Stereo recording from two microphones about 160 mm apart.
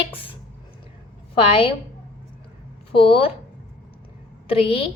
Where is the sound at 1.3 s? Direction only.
35° left (ahead or behind).